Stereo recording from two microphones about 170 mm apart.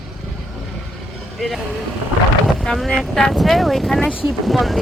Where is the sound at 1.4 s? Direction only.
Centre (ahead or behind).